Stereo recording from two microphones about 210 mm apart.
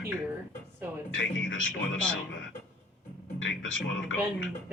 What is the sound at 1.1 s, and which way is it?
Speech, 65° left (ahead or behind).